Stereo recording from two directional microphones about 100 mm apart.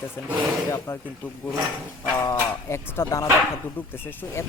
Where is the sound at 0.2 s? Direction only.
25° left (ahead or behind).